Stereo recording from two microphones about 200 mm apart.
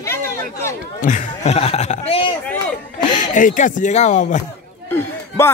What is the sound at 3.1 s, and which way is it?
Speech, 40° left (ahead or behind).